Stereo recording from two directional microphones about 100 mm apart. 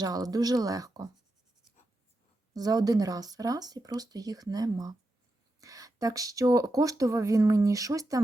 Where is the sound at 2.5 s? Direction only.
40° right (ahead or behind).